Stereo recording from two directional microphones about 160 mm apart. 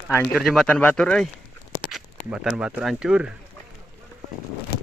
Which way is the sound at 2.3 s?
5° right (ahead or behind).